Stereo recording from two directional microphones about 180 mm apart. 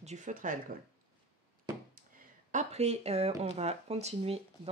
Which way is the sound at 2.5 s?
40° right (ahead or behind).